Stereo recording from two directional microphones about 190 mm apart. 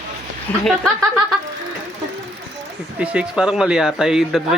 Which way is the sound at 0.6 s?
Centre (ahead or behind).